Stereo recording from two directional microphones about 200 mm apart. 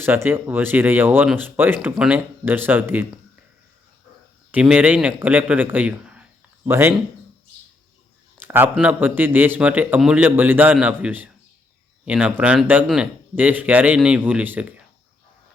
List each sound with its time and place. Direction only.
0.0 s speech: 10° right (ahead or behind)
4.5 s speech: 5° right (ahead or behind)
8.4 s speech: 10° right (ahead or behind)